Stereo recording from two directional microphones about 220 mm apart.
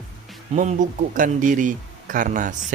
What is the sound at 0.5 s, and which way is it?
Speech, 35° right (ahead or behind).